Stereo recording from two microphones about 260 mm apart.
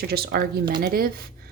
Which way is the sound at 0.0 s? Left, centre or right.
Right.